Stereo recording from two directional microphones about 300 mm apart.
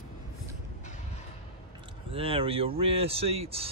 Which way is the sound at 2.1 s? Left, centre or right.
Centre.